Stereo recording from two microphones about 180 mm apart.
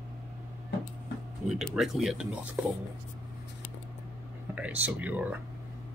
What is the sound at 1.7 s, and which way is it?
Speech, centre (ahead or behind).